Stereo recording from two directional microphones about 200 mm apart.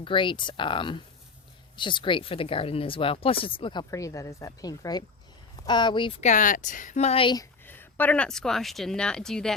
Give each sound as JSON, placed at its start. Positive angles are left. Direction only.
{"t": 0.0, "sound": "speech", "side_deg": 25}
{"t": 7.6, "sound": "speech", "side_deg": 10}